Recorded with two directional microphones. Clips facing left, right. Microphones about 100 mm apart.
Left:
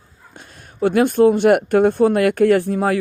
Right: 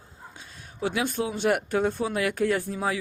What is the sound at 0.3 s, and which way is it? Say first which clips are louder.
Speech: left 11 dB; 55° left (ahead or behind).